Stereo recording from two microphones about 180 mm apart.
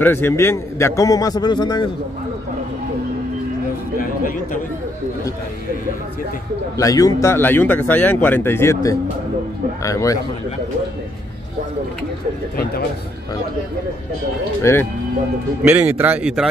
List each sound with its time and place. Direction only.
0.0 s a man's voice: 10° left (ahead or behind)
4.0 s a sound: 50° left (ahead or behind)
6.8 s speech: 20° left (ahead or behind)
14.6 s speech: 15° left (ahead or behind)
15.6 s speech: 10° right (ahead or behind)